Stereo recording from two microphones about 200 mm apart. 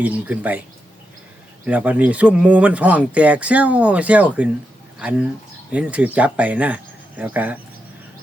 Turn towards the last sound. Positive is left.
turn(degrees=-10)  # may be behind; listen again after turning